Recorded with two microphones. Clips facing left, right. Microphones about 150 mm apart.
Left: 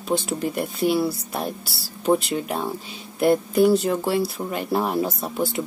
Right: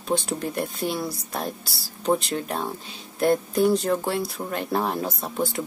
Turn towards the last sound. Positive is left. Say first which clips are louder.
# left 2 dB
turn(degrees=0)  # may be behind; listen again after turning